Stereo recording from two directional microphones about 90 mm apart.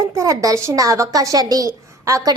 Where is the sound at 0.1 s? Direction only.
40° right (ahead or behind).